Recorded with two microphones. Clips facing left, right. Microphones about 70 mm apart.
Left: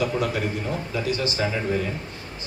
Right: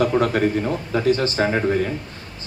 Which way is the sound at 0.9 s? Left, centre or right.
Right.